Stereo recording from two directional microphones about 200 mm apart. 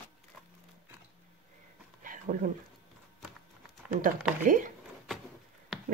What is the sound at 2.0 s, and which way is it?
Dog, 40° right (ahead or behind).